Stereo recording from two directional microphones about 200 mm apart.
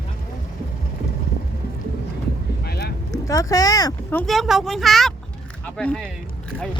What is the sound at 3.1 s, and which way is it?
Speech, 15° left (ahead or behind).